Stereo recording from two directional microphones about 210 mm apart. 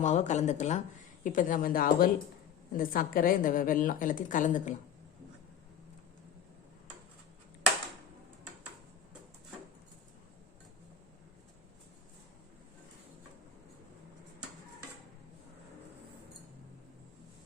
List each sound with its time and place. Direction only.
0.0 s a woman's voice: 35° left (ahead or behind)